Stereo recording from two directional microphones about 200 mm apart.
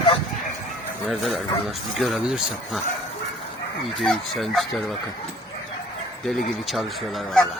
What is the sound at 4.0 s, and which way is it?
Speech, centre (ahead or behind).